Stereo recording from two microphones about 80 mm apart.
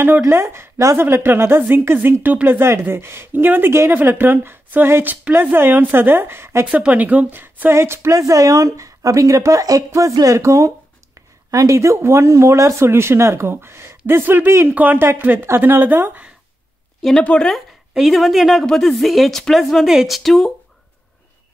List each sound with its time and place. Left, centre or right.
0.2 s speech: right
6.7 s speech: centre
17.2 s speech: centre
17.9 s a woman's voice: centre